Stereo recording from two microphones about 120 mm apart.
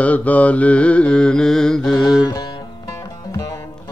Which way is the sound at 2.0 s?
35° left (ahead or behind).